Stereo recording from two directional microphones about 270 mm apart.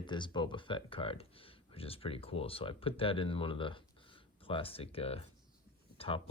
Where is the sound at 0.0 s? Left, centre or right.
Centre.